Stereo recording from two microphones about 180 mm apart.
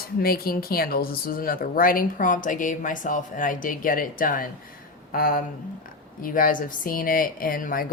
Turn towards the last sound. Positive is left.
turn(degrees=50)  # may be behind; listen again after turning